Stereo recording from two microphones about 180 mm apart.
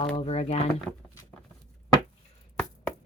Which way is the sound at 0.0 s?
35° left (ahead or behind).